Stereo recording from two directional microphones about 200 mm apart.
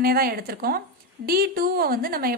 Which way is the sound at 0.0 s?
50° right (ahead or behind).